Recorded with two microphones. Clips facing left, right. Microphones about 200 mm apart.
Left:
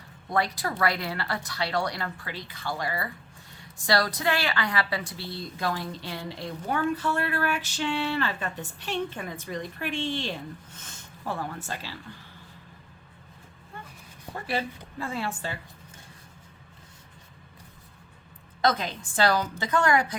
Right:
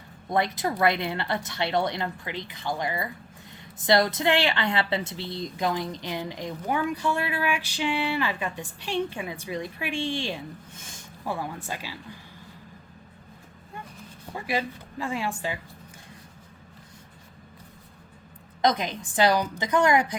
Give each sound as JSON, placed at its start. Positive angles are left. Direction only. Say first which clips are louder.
{"t": 0.3, "sound": "a woman's voice", "louder": "right 2 dB", "side_deg": -20}
{"t": 14.3, "sound": "a woman's voice", "louder": "right 1 dB", "side_deg": -10}
{"t": 18.6, "sound": "a woman's voice", "louder": "right 2 dB", "side_deg": -15}